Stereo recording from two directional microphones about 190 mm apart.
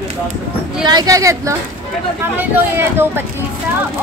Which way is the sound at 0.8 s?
20° right (ahead or behind).